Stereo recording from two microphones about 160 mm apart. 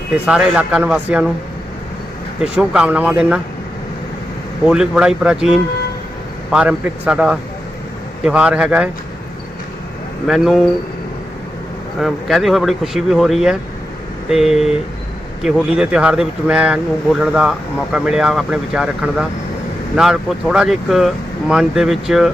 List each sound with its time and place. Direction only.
0.3 s speech: 5° right (ahead or behind)
2.4 s speech: 5° right (ahead or behind)
4.6 s speech: 5° right (ahead or behind)
10.2 s speech: centre (ahead or behind)
11.9 s speech: centre (ahead or behind)